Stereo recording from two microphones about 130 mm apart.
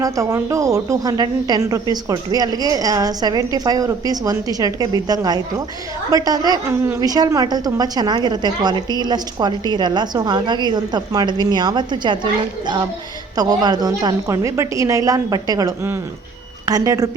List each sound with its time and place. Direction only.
0.0 s a woman's voice: 25° right (ahead or behind)